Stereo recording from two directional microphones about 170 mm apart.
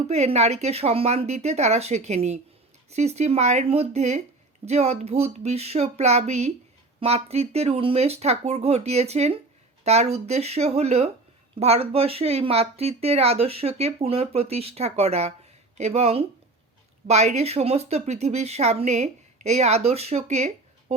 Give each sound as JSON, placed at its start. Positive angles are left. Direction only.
{"t": 0.1, "sound": "speech", "side_deg": -40}